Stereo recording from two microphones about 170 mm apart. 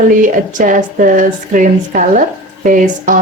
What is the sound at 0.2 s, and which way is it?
A woman's voice, 50° right (ahead or behind).